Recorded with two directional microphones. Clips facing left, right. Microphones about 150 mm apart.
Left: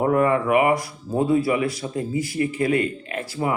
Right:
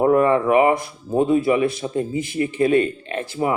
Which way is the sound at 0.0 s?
25° right (ahead or behind).